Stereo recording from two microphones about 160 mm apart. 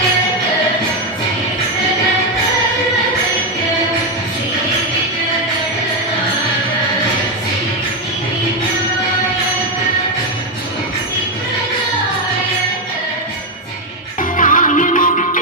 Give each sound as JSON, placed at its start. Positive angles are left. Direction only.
{"t": 14.2, "sound": "music", "side_deg": 55}